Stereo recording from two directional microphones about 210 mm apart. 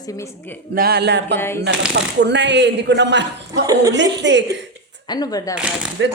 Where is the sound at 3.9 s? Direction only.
55° right (ahead or behind).